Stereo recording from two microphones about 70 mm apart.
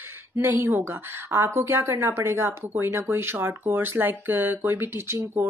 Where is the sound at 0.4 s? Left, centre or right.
Right.